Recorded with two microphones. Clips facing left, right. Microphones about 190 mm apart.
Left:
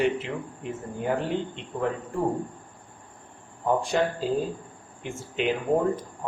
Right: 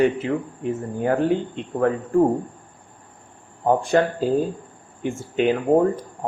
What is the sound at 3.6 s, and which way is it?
Speech, 55° right (ahead or behind).